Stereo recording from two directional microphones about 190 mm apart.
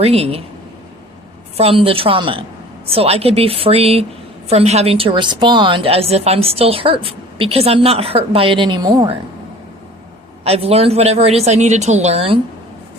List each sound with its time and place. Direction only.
0.0 s a woman's voice: 30° right (ahead or behind)
1.5 s a woman's voice: 30° right (ahead or behind)
10.4 s a woman's voice: 30° right (ahead or behind)